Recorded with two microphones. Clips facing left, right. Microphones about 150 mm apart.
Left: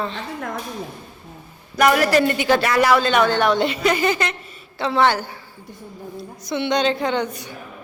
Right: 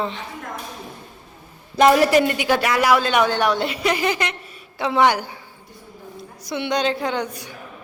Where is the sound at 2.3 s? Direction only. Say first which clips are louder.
Left 2 dB; 10° right (ahead or behind).